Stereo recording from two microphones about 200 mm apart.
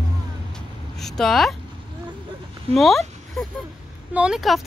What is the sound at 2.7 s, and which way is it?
Dog, centre (ahead or behind).